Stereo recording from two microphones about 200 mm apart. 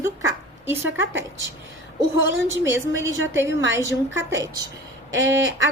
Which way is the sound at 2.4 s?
15° right (ahead or behind).